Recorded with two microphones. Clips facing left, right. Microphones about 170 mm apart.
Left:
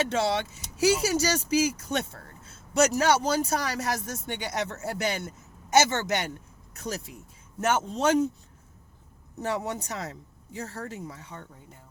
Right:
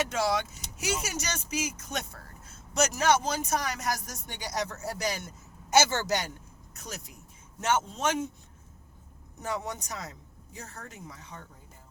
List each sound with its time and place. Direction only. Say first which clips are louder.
0.0 s speech: left 2 dB; 30° left (ahead or behind)
9.4 s speech: left 4 dB; 30° left (ahead or behind)